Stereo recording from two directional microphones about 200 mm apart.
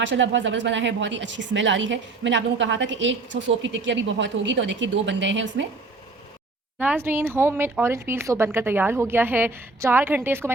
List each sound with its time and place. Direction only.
0.0 s speech: 65° right (ahead or behind)
6.7 s speech: 10° right (ahead or behind)